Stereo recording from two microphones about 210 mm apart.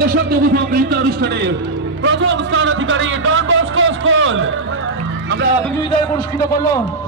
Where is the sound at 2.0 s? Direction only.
60° right (ahead or behind).